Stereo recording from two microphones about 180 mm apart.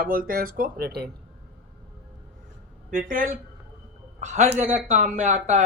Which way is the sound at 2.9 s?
50° right (ahead or behind).